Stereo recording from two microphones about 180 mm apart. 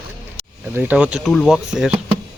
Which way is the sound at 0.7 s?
10° right (ahead or behind).